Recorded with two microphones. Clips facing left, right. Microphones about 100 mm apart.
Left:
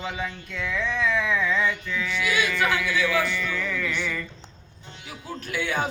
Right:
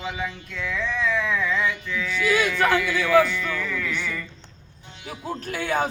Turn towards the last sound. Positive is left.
turn(degrees=-40)  # may be behind; listen again after turning